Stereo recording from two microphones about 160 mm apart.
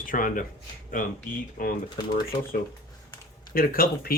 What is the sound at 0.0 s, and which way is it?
Speech, 60° left (ahead or behind).